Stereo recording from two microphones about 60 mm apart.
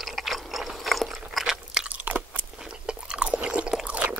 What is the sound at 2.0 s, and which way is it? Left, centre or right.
Chewing, right.